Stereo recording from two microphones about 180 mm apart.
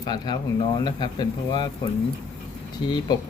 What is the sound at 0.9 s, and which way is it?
Speech, 25° left (ahead or behind).